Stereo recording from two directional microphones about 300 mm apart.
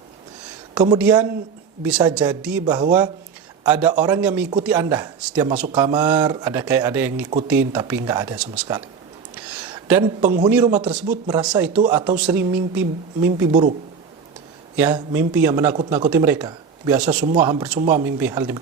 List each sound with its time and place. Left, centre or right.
0.7 s a man's voice: centre
5.5 s speech: right
5.8 s a man's voice: centre
7.3 s speech: right
7.6 s a man's voice: centre
13.3 s speech: right
14.8 s a man's voice: centre